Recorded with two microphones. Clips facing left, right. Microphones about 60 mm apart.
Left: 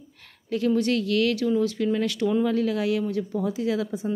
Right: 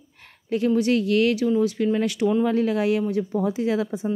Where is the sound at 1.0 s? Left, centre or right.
Right.